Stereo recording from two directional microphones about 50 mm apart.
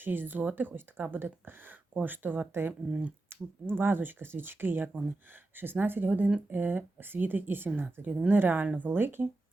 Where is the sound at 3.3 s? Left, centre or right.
Right.